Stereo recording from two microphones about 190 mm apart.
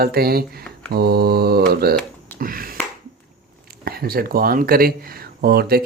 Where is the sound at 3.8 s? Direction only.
55° right (ahead or behind).